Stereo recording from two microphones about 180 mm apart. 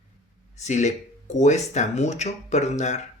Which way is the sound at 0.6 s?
40° left (ahead or behind).